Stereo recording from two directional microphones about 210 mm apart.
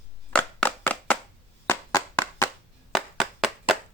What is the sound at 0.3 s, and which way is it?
Clapping, 5° left (ahead or behind).